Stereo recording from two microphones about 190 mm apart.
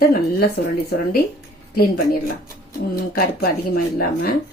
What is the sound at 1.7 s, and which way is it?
Speech, 50° left (ahead or behind).